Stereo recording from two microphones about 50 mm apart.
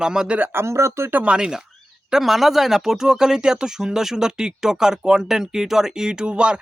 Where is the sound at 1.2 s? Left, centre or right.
Centre.